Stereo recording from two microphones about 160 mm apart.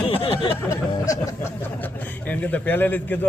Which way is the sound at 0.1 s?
35° left (ahead or behind).